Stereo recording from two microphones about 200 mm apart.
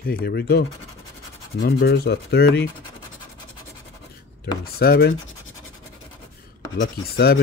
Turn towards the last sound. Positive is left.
turn(degrees=50)  # may be behind; listen again after turning